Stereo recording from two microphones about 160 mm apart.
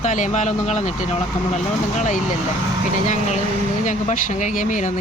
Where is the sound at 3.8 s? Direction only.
50° left (ahead or behind).